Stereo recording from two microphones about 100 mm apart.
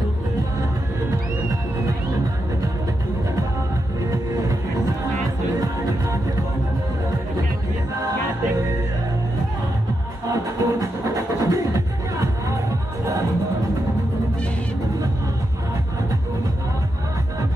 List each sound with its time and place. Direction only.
5.6 s music: 35° right (ahead or behind)
10.3 s music: 35° right (ahead or behind)